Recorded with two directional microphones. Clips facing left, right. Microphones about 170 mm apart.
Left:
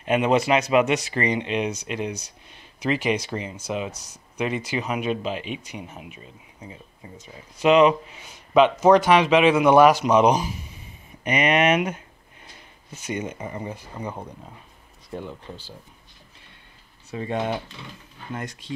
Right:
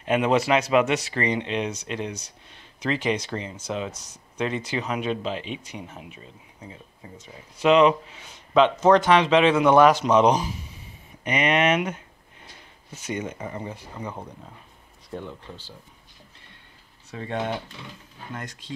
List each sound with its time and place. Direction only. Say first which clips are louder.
0.1 s speech: left 1 dB; 5° left (ahead or behind)
13.1 s speech: left 1 dB; 15° left (ahead or behind)
17.1 s speech: left 2 dB; 10° left (ahead or behind)